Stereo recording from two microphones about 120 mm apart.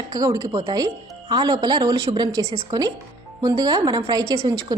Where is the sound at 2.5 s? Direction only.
50° right (ahead or behind).